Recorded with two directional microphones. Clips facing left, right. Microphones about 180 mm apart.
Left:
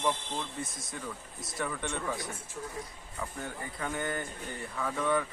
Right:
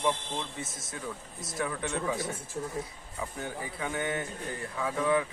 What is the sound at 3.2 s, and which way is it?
Speech, 5° right (ahead or behind).